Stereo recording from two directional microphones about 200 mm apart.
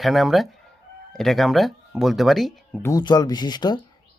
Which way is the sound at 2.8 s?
20° left (ahead or behind).